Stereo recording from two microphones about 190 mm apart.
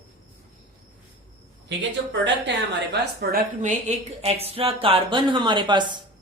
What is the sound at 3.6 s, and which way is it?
Speech, 40° right (ahead or behind).